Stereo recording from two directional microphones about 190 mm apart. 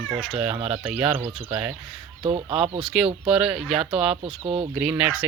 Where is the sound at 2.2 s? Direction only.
30° right (ahead or behind).